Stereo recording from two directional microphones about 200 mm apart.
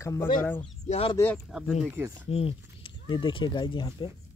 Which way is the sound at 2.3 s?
30° left (ahead or behind).